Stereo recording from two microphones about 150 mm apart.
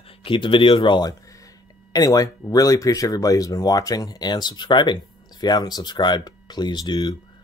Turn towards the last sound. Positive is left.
turn(degrees=25)  # may be behind; listen again after turning